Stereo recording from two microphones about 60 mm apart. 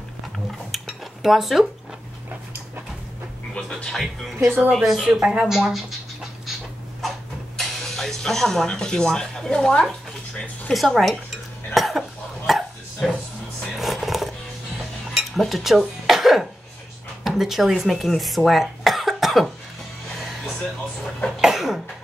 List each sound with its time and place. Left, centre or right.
0.7 s dishes: centre
3.5 s speech: centre
7.5 s speech: centre
10.3 s music: left
10.7 s speech: centre
11.7 s cough: centre
12.4 s dog: centre
13.7 s a sound: centre
15.1 s cutlery: centre
16.1 s cough: centre
17.2 s speech: centre
21.4 s cough: centre